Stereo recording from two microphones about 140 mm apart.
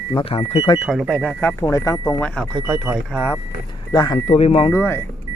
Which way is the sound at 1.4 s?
20° left (ahead or behind).